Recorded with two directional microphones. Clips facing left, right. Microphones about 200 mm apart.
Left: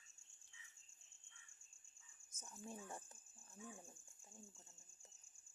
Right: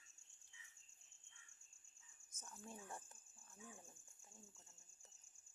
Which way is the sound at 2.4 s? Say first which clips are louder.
Left 3 dB; 15° left (ahead or behind).